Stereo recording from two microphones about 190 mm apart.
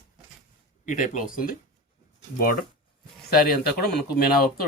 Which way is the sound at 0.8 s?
40° left (ahead or behind).